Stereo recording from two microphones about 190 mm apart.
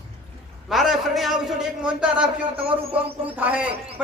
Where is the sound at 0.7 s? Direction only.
Centre (ahead or behind).